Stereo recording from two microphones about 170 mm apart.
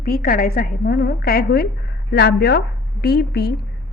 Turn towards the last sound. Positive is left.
turn(degrees=70)  # may be behind; listen again after turning